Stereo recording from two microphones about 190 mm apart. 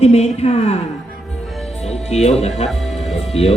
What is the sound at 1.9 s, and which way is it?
A woman's voice, 35° left (ahead or behind).